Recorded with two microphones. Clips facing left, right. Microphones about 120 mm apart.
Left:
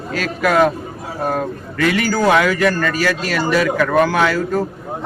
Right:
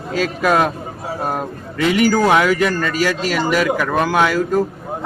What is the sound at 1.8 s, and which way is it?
A man's voice, 20° right (ahead or behind).